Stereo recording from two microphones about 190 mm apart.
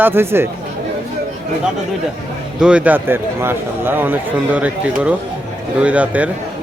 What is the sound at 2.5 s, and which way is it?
A man's voice, 5° right (ahead or behind).